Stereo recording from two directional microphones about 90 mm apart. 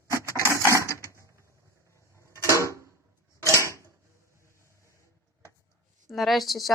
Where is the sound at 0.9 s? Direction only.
35° left (ahead or behind).